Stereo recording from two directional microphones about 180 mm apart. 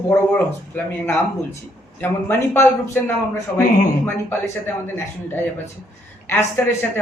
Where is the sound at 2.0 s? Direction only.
10° left (ahead or behind).